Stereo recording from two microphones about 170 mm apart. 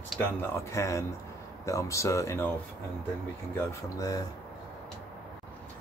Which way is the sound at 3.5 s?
15° left (ahead or behind).